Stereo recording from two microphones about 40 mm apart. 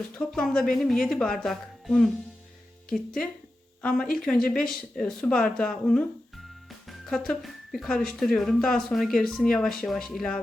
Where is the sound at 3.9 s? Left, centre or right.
Centre.